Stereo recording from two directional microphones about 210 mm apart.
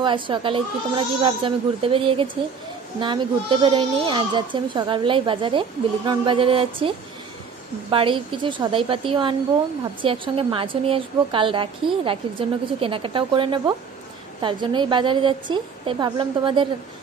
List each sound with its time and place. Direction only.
0.0 s speech: 25° right (ahead or behind)
7.9 s speech: 25° right (ahead or behind)